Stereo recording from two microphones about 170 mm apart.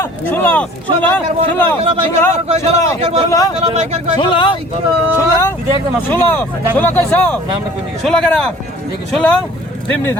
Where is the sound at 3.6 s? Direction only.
40° right (ahead or behind).